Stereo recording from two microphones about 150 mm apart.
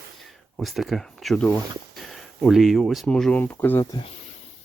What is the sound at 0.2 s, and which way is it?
Speech, centre (ahead or behind).